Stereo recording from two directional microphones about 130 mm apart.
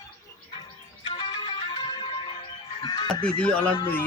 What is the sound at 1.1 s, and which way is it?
Music, 35° left (ahead or behind).